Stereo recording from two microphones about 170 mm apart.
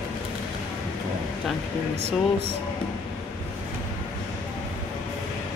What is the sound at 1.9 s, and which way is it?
Speech, 40° right (ahead or behind).